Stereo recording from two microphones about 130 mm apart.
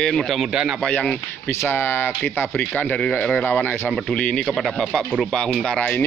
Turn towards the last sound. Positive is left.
turn(degrees=10)  # may be behind; listen again after turning